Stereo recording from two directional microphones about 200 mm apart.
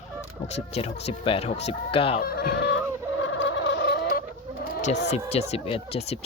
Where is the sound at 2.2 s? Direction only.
50° left (ahead or behind).